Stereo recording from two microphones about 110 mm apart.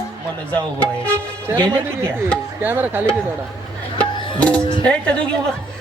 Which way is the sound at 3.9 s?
10° left (ahead or behind).